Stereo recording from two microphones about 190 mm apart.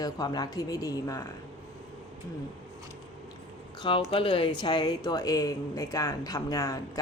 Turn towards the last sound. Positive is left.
turn(degrees=15)  # may be behind; listen again after turning